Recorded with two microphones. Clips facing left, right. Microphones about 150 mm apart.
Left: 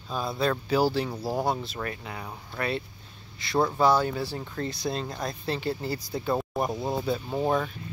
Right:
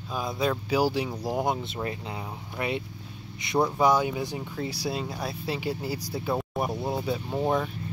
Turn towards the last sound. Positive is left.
turn(degrees=5)  # may be behind; listen again after turning